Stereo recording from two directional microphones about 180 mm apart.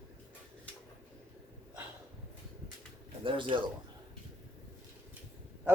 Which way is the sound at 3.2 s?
25° right (ahead or behind).